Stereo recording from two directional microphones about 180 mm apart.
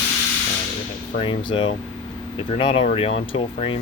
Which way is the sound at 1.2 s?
25° left (ahead or behind).